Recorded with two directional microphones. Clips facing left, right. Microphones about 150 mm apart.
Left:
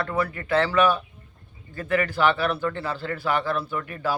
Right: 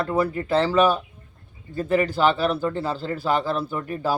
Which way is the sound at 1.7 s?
25° right (ahead or behind).